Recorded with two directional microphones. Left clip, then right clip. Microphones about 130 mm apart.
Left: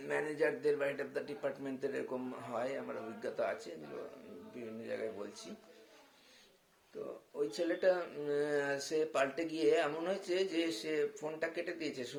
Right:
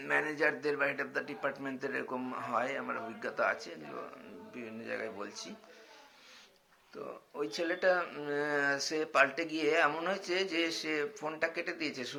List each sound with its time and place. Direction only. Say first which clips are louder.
0.0 s speech: right 4 dB; 20° left (ahead or behind)
7.3 s speech: right 1 dB; 25° left (ahead or behind)